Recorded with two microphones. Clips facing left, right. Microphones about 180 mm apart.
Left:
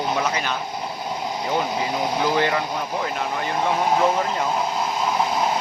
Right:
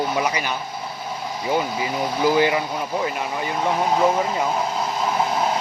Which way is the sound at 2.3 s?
10° right (ahead or behind).